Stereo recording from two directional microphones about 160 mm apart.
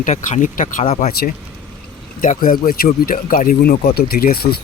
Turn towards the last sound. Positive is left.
turn(degrees=75)  # may be behind; listen again after turning